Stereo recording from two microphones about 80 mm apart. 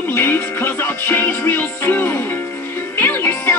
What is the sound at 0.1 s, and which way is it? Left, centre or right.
Music, left.